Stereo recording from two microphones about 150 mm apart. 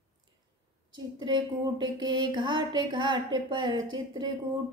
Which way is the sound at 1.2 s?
30° right (ahead or behind).